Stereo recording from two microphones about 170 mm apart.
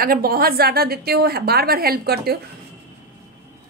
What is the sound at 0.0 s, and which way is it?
A woman's voice, 60° right (ahead or behind).